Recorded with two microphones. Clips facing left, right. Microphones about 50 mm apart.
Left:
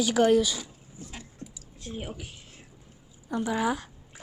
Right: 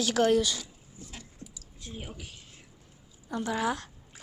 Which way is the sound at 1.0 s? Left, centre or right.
Left.